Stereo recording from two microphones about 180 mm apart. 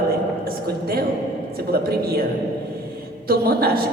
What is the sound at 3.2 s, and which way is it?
Speech, 60° right (ahead or behind).